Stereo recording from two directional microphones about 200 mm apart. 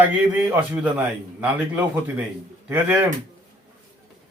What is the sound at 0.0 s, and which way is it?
A man's voice, 10° right (ahead or behind).